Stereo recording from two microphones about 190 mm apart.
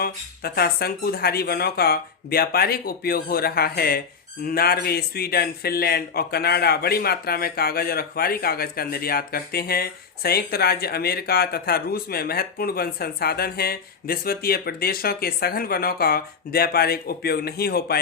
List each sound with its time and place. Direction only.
0.0 s speech: 55° left (ahead or behind)